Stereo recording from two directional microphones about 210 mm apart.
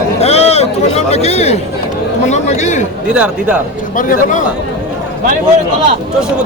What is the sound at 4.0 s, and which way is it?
Speech, 40° left (ahead or behind).